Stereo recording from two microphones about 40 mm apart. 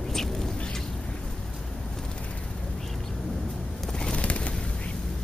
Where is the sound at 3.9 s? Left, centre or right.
Left.